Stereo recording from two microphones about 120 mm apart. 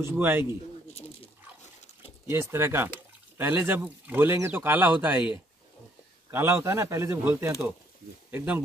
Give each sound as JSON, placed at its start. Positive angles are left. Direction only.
{"t": 0.0, "sound": "speech", "side_deg": -15}
{"t": 2.2, "sound": "speech", "side_deg": -20}